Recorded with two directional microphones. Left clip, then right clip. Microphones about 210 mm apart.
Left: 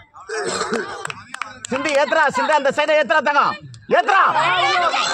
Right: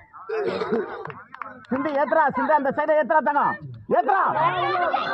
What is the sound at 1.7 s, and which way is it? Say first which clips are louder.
Speech: left 5 dB; 35° left (ahead or behind).